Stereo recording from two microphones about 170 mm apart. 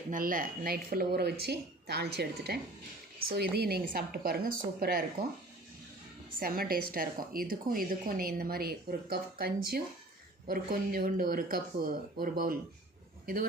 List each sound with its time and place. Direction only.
0.1 s a woman's voice: 55° right (ahead or behind)
6.4 s a woman's voice: 60° right (ahead or behind)